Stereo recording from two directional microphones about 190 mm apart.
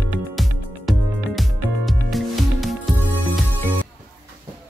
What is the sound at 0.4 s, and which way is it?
Music, centre (ahead or behind).